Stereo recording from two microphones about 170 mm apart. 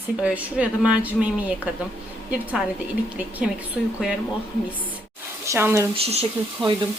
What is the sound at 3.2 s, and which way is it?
Speech, 10° right (ahead or behind).